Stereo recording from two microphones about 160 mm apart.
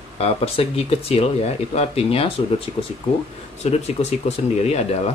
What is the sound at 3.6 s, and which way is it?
Speech, 45° left (ahead or behind).